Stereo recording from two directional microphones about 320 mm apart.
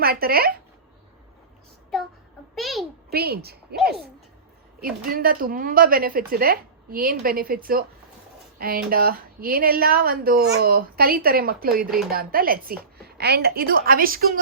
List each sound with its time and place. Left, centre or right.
0.0 s speech: right
2.6 s a sound: centre
3.1 s a woman's voice: right
4.8 s speech: right